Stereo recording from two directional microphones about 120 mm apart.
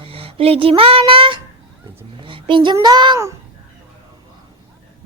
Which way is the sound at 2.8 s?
35° right (ahead or behind).